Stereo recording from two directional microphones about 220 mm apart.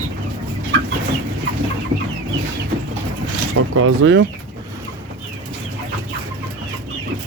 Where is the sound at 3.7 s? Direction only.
70° right (ahead or behind).